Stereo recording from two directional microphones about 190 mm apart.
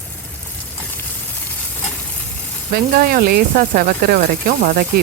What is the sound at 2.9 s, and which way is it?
A woman's voice, 50° right (ahead or behind).